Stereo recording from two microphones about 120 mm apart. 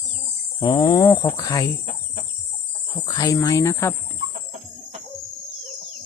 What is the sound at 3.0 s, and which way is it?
Speech, 30° left (ahead or behind).